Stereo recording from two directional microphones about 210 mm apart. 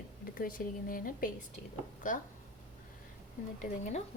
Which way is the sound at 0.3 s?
45° left (ahead or behind).